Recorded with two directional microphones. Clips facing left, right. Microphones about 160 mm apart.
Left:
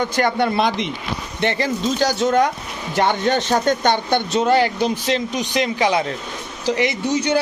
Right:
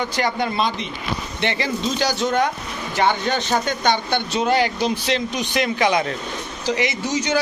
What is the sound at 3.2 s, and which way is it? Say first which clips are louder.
Speech: left 4 dB; 45° left (ahead or behind).